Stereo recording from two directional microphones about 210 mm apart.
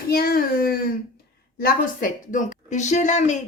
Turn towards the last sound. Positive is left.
turn(degrees=35)  # may be behind; listen again after turning